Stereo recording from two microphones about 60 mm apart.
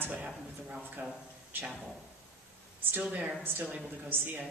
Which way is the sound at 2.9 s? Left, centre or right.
Right.